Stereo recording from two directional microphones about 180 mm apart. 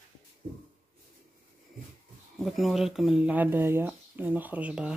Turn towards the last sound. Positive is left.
turn(degrees=-5)  # may be behind; listen again after turning